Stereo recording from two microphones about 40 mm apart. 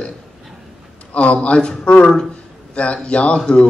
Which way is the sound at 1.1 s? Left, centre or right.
Left.